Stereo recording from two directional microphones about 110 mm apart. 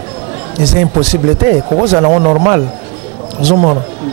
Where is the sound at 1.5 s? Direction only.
20° right (ahead or behind).